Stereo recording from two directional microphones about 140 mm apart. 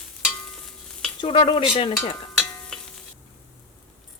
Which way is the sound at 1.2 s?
35° left (ahead or behind).